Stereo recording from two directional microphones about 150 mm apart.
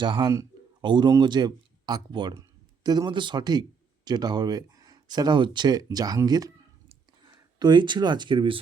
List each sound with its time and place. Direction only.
0.0 s a man's voice: 30° right (ahead or behind)